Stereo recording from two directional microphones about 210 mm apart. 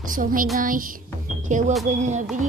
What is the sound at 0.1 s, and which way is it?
Speech, 40° right (ahead or behind).